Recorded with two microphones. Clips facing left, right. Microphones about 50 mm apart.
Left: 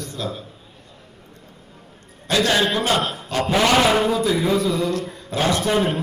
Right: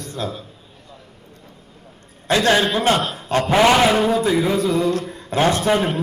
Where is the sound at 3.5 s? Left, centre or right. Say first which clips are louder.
Right 3 dB; right.